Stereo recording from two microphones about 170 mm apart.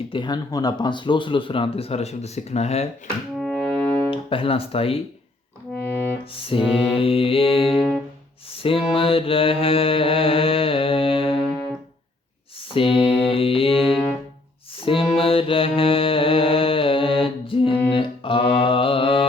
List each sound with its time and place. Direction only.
0.1 s speech: 25° left (ahead or behind)
3.3 s music: 5° left (ahead or behind)
4.1 s speech: 30° left (ahead or behind)
5.7 s music: 10° left (ahead or behind)
6.3 s speech: 30° left (ahead or behind)
7.7 s music: centre (ahead or behind)
8.4 s mantra: 30° left (ahead or behind)
12.7 s mantra: 30° left (ahead or behind)
13.7 s music: 5° right (ahead or behind)
14.8 s mantra: 35° left (ahead or behind)